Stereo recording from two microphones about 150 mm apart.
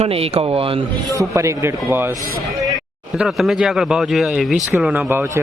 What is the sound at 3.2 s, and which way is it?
Speech, centre (ahead or behind).